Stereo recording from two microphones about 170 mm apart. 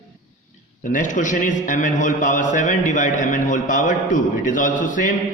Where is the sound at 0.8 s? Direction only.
50° left (ahead or behind).